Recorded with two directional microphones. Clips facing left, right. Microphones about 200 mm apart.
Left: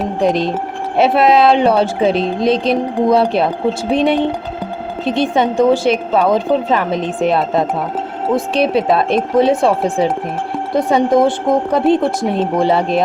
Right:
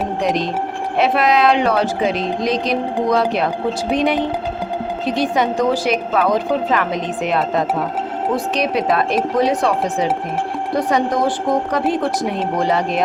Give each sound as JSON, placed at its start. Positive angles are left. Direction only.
{"t": 0.9, "sound": "a woman's voice", "side_deg": 30}